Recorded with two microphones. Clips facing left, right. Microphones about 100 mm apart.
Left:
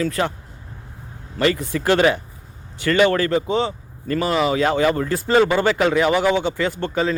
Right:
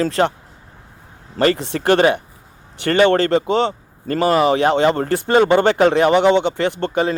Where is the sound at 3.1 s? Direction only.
65° right (ahead or behind).